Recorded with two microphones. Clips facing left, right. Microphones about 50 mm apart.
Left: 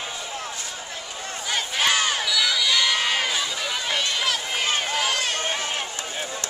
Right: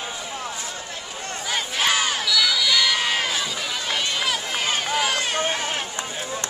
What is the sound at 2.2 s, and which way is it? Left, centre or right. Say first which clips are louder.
Crowd: right 1 dB; centre.